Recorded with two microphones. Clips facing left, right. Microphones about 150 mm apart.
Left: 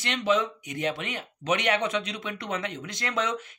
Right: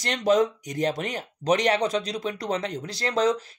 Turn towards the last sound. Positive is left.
turn(degrees=-35)  # may be behind; listen again after turning